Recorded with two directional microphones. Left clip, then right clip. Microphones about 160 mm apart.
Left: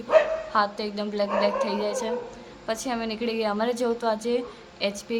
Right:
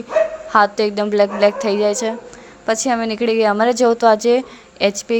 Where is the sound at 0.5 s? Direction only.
65° right (ahead or behind).